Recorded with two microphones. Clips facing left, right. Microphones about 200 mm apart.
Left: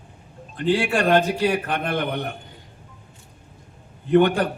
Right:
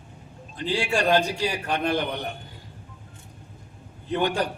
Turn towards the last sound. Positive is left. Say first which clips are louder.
# left 8 dB
turn(degrees=55)  # may be behind; listen again after turning